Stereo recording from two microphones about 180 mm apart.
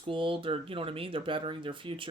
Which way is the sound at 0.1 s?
30° right (ahead or behind).